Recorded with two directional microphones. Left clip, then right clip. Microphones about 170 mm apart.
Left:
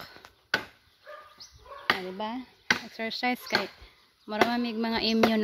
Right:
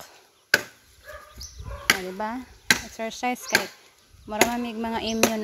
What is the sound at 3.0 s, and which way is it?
A woman's voice, 20° left (ahead or behind).